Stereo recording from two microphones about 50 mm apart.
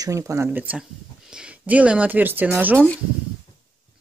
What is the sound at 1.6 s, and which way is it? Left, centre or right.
Speech, right.